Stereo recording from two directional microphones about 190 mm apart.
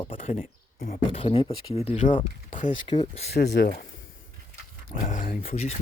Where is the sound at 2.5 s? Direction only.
40° left (ahead or behind).